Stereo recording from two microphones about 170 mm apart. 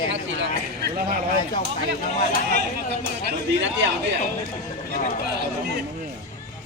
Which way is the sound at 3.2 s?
90° right.